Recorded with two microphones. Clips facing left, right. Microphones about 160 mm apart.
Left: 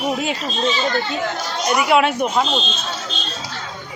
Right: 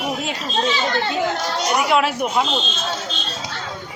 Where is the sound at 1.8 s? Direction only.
Centre (ahead or behind).